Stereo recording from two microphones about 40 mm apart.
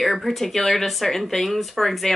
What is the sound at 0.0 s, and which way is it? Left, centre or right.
A woman's voice, centre.